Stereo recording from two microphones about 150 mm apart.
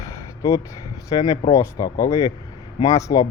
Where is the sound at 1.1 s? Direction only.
25° left (ahead or behind).